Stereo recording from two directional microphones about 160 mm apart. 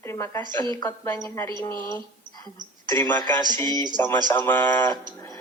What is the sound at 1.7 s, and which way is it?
Speech, 25° right (ahead or behind).